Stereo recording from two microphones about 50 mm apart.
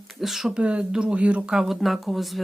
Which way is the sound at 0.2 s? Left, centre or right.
Centre.